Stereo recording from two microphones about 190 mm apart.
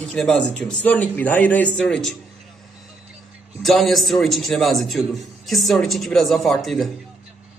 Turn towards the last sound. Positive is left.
turn(degrees=0)  # may be behind; listen again after turning